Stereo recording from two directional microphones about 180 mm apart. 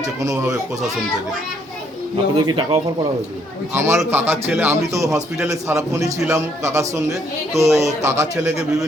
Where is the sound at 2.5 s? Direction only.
25° right (ahead or behind).